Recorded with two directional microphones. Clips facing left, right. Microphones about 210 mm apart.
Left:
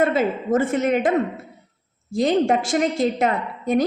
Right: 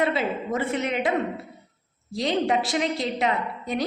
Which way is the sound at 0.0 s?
45° left (ahead or behind).